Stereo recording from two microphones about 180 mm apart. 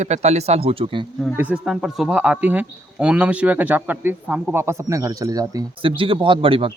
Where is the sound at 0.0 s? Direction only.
40° right (ahead or behind).